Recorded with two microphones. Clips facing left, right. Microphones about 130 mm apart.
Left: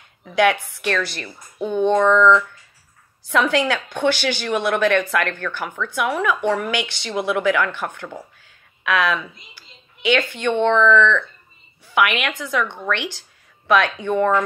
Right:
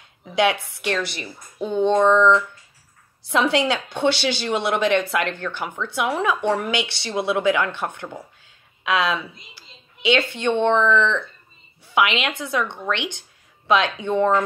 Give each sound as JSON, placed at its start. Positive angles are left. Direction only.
{"t": 0.2, "sound": "a woman's voice", "side_deg": -20}
{"t": 9.6, "sound": "a sound", "side_deg": -25}
{"t": 10.6, "sound": "a woman's voice", "side_deg": -20}